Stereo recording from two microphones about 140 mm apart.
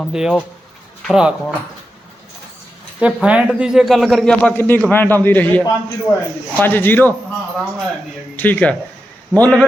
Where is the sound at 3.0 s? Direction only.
10° right (ahead or behind); by 7.1 s 15° left (ahead or behind).